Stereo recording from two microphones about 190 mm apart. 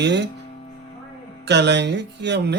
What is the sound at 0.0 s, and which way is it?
Speech, 65° right (ahead or behind).